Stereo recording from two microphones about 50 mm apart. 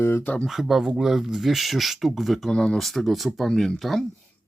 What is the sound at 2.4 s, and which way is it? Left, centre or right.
Speech, centre.